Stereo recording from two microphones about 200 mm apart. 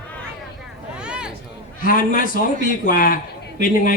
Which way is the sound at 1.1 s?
5° right (ahead or behind).